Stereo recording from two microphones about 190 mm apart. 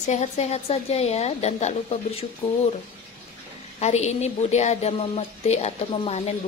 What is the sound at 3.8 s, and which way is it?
Speech, 35° left (ahead or behind).